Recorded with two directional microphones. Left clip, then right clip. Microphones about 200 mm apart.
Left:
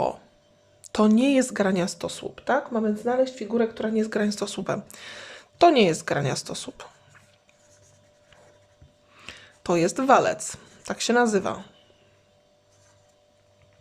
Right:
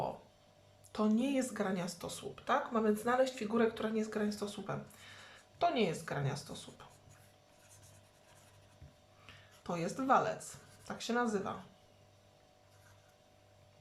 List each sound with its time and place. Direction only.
0.9 s speech: 45° left (ahead or behind)
9.2 s speech: 50° left (ahead or behind)